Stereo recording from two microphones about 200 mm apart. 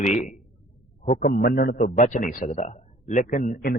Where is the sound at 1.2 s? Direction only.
50° left (ahead or behind).